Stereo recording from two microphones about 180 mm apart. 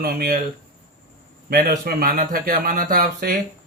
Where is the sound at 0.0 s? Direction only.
55° right (ahead or behind).